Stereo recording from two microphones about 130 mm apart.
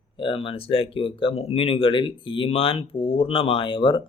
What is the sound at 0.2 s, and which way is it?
Speech, 40° left (ahead or behind).